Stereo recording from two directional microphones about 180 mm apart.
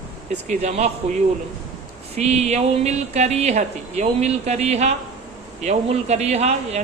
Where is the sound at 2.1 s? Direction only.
35° right (ahead or behind).